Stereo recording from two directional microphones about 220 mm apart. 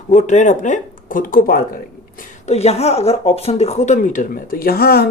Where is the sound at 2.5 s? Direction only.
30° left (ahead or behind).